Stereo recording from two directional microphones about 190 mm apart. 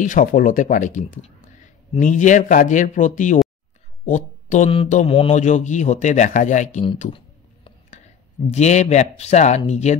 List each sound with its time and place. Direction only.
0.0 s speech: 45° left (ahead or behind)
8.5 s speech: 35° left (ahead or behind)